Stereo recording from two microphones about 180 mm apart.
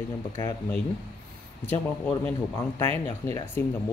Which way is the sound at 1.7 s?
10° left (ahead or behind).